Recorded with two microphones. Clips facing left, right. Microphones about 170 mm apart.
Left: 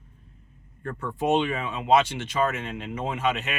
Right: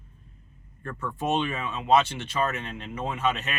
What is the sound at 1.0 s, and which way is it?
Speech, 15° left (ahead or behind).